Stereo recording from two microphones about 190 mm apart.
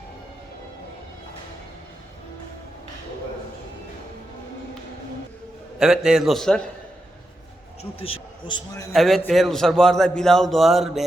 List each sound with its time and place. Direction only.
5.8 s a man's voice: 5° right (ahead or behind)
7.8 s a man's voice: 30° left (ahead or behind)
8.9 s a man's voice: centre (ahead or behind)